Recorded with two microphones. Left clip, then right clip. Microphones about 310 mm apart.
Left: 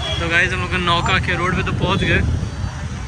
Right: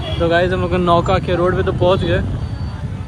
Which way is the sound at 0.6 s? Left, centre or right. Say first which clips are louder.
Right 3 dB; centre.